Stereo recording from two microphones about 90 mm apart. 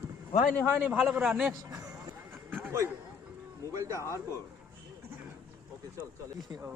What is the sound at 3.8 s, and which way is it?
Speech, 35° right (ahead or behind).